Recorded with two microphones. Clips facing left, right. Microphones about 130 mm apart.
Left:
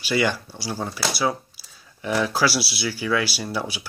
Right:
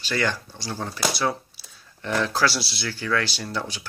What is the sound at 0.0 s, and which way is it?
Speech, 10° left (ahead or behind).